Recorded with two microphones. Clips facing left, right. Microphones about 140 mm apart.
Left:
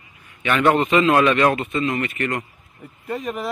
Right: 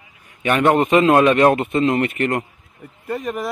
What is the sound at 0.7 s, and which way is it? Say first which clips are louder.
Speech: right 3 dB; 45° right (ahead or behind).